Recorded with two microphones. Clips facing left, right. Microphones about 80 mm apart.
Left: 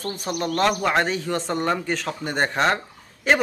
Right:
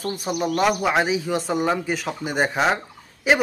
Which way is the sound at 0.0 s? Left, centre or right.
Centre.